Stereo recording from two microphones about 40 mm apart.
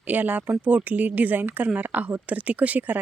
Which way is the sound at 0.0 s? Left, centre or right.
Right.